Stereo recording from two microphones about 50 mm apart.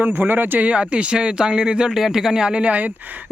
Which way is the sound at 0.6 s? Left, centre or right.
Right.